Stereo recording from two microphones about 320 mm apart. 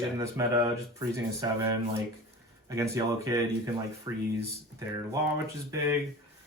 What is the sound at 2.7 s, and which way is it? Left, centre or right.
Speech, centre.